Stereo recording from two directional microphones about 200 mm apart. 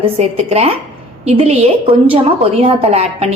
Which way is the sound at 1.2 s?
30° right (ahead or behind).